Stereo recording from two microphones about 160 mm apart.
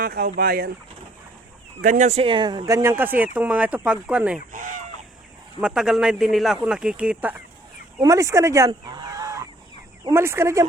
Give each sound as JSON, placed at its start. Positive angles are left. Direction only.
{"t": 0.0, "sound": "speech", "side_deg": -70}
{"t": 1.8, "sound": "speech", "side_deg": -55}
{"t": 4.5, "sound": "speech", "side_deg": -55}
{"t": 5.5, "sound": "a man's voice", "side_deg": -5}
{"t": 8.0, "sound": "speech", "side_deg": -20}